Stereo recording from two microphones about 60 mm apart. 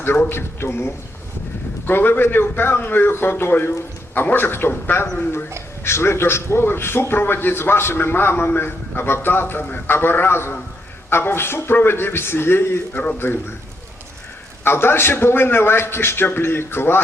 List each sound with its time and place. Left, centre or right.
0.3 s a man's voice: left
14.6 s a man's voice: left